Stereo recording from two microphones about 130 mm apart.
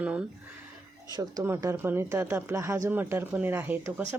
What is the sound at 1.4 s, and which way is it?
Speech, 20° right (ahead or behind).